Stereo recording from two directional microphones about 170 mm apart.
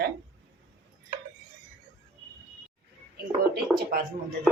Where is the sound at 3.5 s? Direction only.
65° right (ahead or behind).